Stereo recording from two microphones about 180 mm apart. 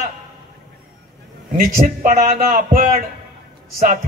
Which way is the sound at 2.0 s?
45° right (ahead or behind).